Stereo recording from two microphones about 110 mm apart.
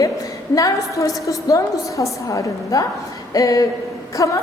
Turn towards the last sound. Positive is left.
turn(degrees=30)  # may be behind; listen again after turning